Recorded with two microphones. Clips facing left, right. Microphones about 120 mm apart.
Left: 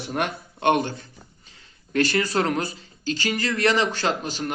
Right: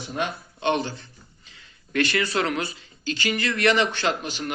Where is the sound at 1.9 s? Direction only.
40° left (ahead or behind).